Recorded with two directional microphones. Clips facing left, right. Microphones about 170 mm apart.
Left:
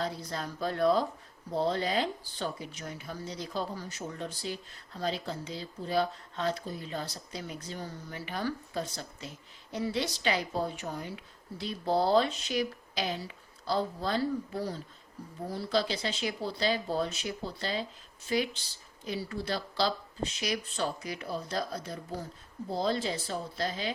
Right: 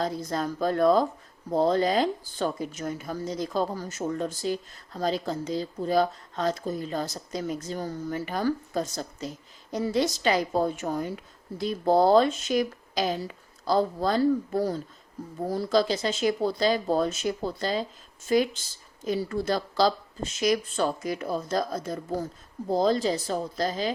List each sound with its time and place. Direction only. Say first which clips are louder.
0.0 s speech: right 7 dB; 45° right (ahead or behind)